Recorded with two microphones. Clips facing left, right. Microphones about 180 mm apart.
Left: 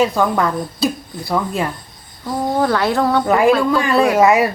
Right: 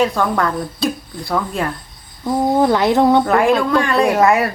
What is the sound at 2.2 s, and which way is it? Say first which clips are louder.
Speech: right 3 dB; 20° right (ahead or behind).